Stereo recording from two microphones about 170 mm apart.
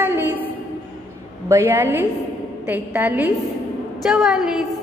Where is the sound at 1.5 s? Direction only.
10° right (ahead or behind).